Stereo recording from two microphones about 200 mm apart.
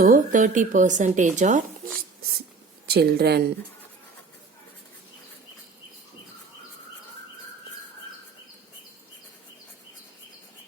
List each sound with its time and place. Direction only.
0.0 s speech: 40° right (ahead or behind)
2.8 s a woman's voice: 55° right (ahead or behind)